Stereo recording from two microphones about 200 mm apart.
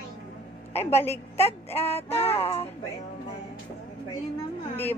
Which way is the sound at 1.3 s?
30° left (ahead or behind).